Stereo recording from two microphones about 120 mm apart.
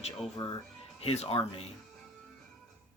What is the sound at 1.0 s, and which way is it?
Speech, 55° left (ahead or behind).